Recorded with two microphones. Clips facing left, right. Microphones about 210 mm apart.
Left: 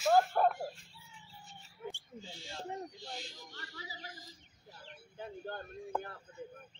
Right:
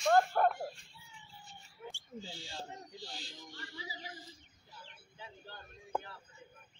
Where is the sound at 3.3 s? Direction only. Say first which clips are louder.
Right 1 dB; 40° left (ahead or behind).